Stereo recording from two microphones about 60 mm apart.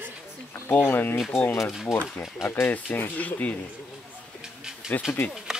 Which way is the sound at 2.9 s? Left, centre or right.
Left.